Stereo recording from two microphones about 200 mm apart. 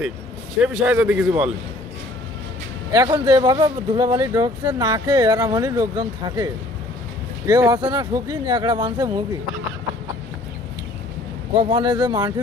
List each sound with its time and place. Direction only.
0.6 s a man's voice: 5° right (ahead or behind)
2.9 s speech: 20° right (ahead or behind)
11.7 s speech: 20° right (ahead or behind)